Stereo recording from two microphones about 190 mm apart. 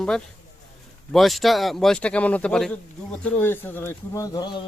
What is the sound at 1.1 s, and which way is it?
Speech, centre (ahead or behind).